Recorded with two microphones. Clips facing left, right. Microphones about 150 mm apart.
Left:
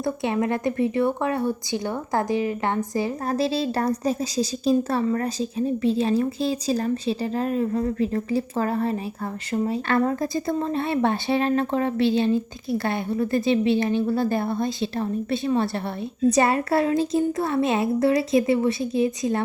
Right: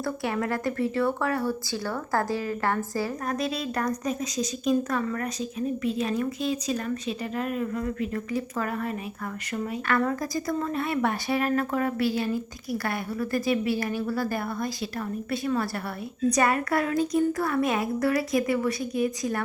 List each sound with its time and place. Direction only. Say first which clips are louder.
0.0 s a woman's voice: left 4 dB; 20° left (ahead or behind)
3.2 s a woman's voice: left 6 dB; 30° left (ahead or behind)